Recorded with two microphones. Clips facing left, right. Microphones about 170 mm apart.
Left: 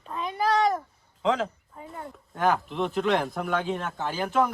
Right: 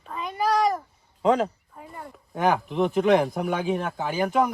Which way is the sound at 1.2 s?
45° right (ahead or behind).